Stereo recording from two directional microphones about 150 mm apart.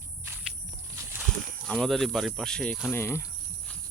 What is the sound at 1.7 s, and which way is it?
Speech, centre (ahead or behind).